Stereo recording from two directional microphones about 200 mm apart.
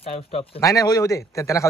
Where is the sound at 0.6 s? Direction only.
15° left (ahead or behind).